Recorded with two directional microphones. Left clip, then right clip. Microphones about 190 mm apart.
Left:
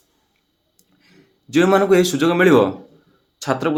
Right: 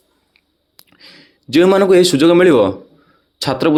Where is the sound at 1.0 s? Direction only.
40° right (ahead or behind).